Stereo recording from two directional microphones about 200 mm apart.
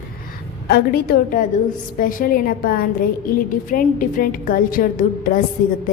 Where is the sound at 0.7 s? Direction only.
50° left (ahead or behind).